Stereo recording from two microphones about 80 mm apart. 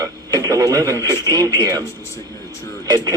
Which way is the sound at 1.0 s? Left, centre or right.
Right.